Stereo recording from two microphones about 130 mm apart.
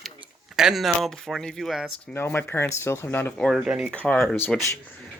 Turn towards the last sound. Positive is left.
turn(degrees=15)  # may be behind; listen again after turning